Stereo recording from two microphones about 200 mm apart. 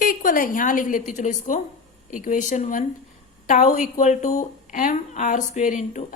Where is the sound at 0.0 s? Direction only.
45° left (ahead or behind).